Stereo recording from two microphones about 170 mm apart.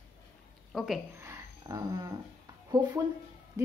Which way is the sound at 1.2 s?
15° right (ahead or behind).